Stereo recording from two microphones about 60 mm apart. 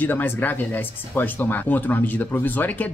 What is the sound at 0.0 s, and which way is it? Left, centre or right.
Speech, left.